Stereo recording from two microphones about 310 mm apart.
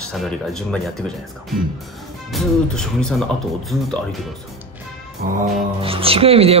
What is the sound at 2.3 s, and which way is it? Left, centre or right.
Speech, centre.